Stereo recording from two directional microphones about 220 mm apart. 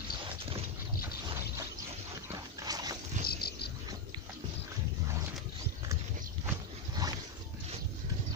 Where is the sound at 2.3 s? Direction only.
15° right (ahead or behind).